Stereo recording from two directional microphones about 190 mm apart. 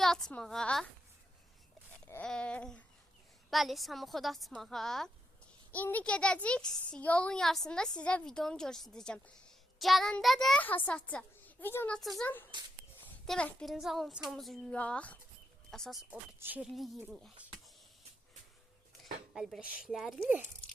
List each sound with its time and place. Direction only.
0.0 s a woman's voice: centre (ahead or behind)
2.0 s a child's voice: 5° left (ahead or behind)
19.3 s a child's voice: centre (ahead or behind)